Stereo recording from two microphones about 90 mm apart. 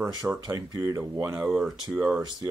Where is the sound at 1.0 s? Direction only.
30° right (ahead or behind).